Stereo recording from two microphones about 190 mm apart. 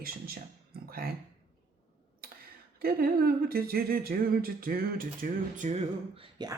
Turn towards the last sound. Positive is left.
turn(degrees=-25)  # may be behind; listen again after turning